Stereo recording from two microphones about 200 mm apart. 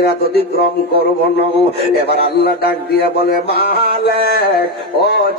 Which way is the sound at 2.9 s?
50° left (ahead or behind).